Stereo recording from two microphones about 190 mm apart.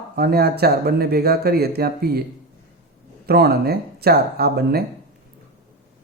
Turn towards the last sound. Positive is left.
turn(degrees=-55)  # may be behind; listen again after turning